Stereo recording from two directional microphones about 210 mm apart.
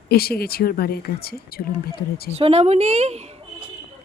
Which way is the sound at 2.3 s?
30° right (ahead or behind).